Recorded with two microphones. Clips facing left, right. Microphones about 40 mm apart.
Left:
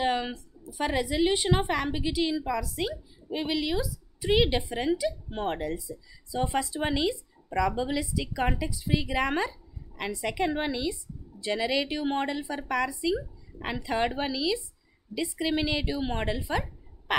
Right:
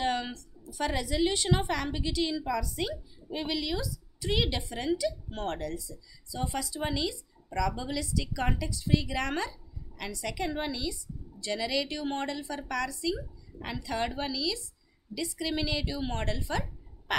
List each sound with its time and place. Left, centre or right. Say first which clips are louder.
0.0 s a woman's voice: left 3 dB; centre
3.3 s a woman's voice: left 3 dB; centre